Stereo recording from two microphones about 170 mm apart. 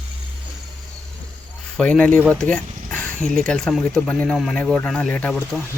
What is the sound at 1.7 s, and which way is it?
Speech, 5° left (ahead or behind).